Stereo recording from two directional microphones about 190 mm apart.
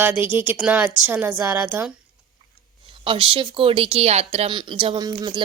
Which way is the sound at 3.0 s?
25° right (ahead or behind).